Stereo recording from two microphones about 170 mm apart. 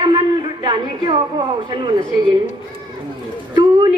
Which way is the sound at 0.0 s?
30° right (ahead or behind).